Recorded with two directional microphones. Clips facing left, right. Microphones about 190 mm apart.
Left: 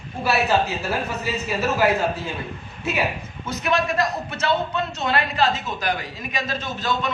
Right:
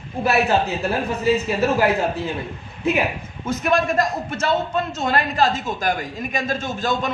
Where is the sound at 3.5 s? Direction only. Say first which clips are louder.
Right 3 dB; 50° right (ahead or behind).